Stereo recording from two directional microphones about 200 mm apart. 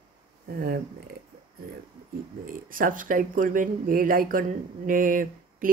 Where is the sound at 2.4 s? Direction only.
45° right (ahead or behind).